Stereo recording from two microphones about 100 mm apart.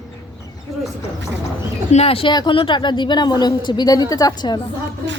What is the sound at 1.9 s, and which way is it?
Speech, 80° left.